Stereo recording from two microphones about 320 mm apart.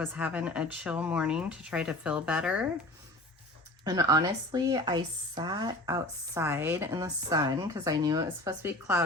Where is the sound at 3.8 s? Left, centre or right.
Centre.